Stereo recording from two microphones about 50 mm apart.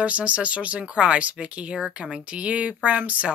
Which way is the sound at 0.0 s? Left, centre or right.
Right.